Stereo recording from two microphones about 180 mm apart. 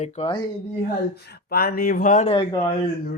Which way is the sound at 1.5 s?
55° left (ahead or behind).